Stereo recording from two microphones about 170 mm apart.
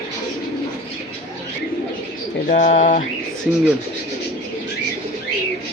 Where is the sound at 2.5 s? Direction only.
50° left (ahead or behind).